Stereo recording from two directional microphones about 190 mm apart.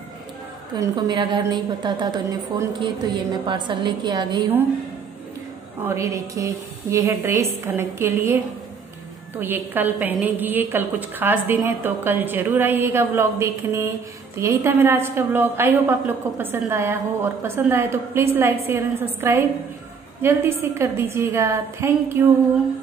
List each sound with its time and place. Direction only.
0.7 s a woman's voice: 20° right (ahead or behind)
5.9 s a woman's voice: 15° right (ahead or behind)
9.4 s a woman's voice: 10° right (ahead or behind)